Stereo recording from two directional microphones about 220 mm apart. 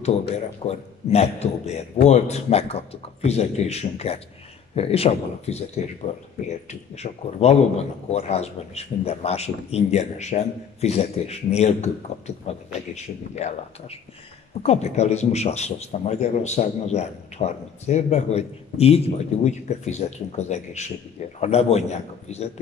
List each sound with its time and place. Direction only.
0.7 s speech: 30° left (ahead or behind)